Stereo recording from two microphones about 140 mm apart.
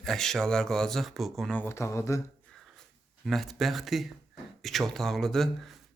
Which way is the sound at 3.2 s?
Centre (ahead or behind).